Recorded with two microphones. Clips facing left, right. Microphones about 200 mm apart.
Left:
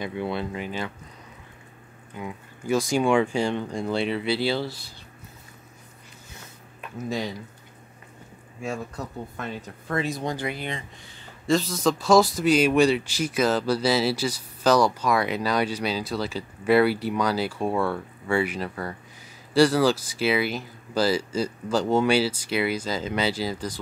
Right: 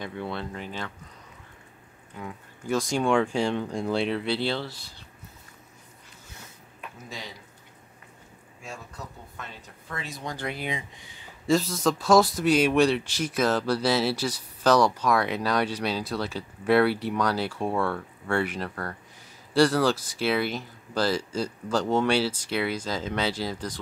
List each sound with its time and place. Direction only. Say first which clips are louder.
0.0 s speech: left 4 dB; 10° left (ahead or behind)
2.1 s speech: left 3 dB; 10° left (ahead or behind)
8.6 s speech: left 9 dB; 55° left (ahead or behind)
10.3 s speech: left 3 dB; 5° left (ahead or behind)
10.6 s speech: even; 10° right (ahead or behind)